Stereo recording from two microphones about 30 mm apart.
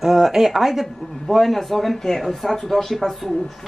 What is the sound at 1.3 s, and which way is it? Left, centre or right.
A woman's voice, centre.